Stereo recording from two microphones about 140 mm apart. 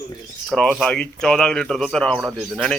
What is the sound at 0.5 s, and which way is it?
Speech, 5° left (ahead or behind).